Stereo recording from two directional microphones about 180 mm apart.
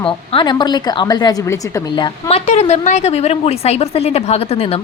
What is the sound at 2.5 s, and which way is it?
A woman's voice, 40° left (ahead or behind).